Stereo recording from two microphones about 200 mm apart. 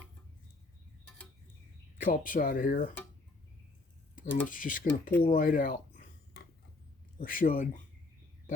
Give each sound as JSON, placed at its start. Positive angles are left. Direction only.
{"t": 2.0, "sound": "speech", "side_deg": 45}
{"t": 4.4, "sound": "speech", "side_deg": 40}
{"t": 5.2, "sound": "a sound", "side_deg": 45}
{"t": 7.2, "sound": "speech", "side_deg": 45}